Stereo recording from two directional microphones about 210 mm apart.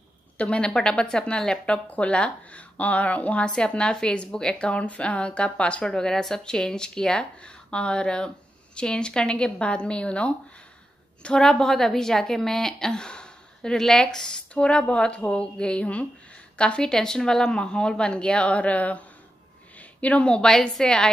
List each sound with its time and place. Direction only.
0.4 s speech: 5° left (ahead or behind)